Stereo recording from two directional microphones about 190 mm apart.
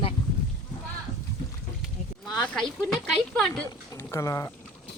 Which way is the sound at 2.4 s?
5° left (ahead or behind).